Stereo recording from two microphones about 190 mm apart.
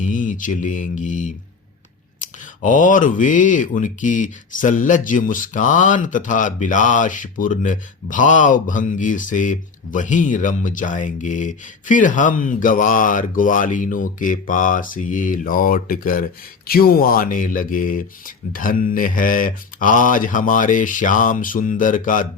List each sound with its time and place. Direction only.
0.0 s speech: 40° left (ahead or behind)